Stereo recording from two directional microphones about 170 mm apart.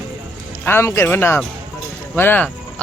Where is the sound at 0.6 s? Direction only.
15° left (ahead or behind).